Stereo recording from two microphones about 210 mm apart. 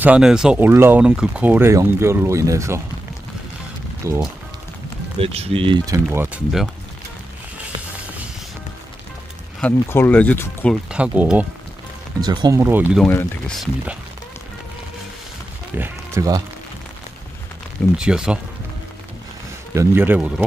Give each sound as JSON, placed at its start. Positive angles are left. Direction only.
{"t": 0.0, "sound": "speech", "side_deg": -5}
{"t": 4.0, "sound": "speech", "side_deg": -15}
{"t": 5.2, "sound": "speech", "side_deg": -30}
{"t": 6.0, "sound": "speech", "side_deg": -5}
{"t": 9.6, "sound": "speech", "side_deg": 10}
{"t": 10.9, "sound": "speech", "side_deg": -5}
{"t": 12.2, "sound": "speech", "side_deg": -20}
{"t": 13.0, "sound": "speech", "side_deg": 5}
{"t": 15.7, "sound": "speech", "side_deg": -10}
{"t": 17.9, "sound": "speech", "side_deg": -5}
{"t": 19.7, "sound": "speech", "side_deg": -10}